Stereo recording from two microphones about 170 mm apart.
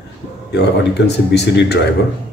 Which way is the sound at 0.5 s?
85° left.